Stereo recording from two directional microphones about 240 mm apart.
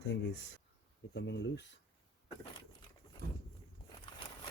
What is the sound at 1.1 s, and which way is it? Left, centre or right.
Speech, left.